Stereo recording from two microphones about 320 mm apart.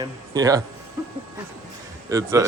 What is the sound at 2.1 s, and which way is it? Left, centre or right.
Speech, centre.